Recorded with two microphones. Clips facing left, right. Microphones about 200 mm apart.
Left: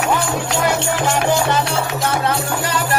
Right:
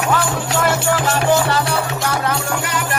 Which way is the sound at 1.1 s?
20° left (ahead or behind).